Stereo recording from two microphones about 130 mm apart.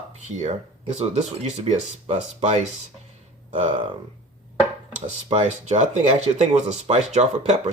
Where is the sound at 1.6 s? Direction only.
60° right (ahead or behind).